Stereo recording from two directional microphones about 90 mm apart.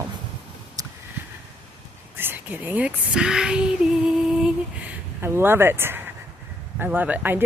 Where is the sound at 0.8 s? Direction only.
45° right (ahead or behind).